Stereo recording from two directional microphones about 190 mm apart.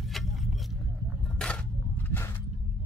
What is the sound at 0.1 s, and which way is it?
Vehicle, centre (ahead or behind).